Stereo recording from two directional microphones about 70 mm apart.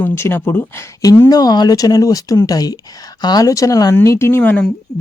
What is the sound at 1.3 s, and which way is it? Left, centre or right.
Speech, left.